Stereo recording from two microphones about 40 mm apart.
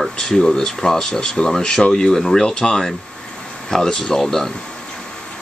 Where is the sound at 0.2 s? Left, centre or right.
Centre.